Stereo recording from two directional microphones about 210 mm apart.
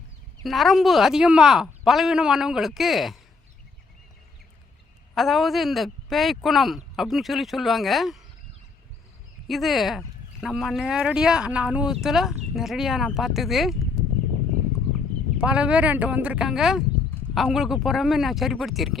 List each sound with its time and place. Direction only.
0.4 s speech: centre (ahead or behind)
5.1 s speech: centre (ahead or behind)
9.5 s speech: centre (ahead or behind)
15.4 s speech: 5° right (ahead or behind)